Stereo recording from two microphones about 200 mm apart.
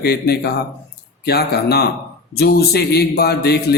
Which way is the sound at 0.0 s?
55° left (ahead or behind).